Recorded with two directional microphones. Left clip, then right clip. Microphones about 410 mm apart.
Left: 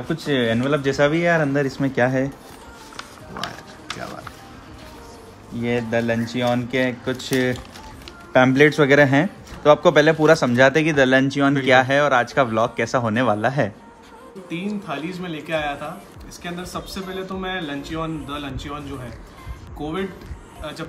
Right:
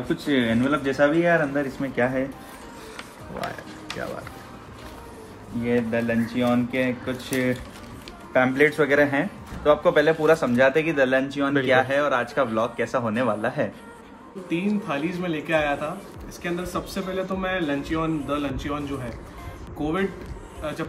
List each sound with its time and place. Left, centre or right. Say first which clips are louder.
0.1 s speech: left 3 dB; left
5.6 s speech: left 2 dB; left
14.5 s a man's voice: right 2 dB; centre